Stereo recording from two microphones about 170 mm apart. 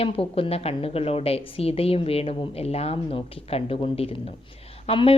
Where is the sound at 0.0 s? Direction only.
35° left (ahead or behind).